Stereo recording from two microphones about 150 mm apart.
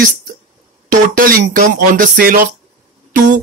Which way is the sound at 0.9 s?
70° right (ahead or behind).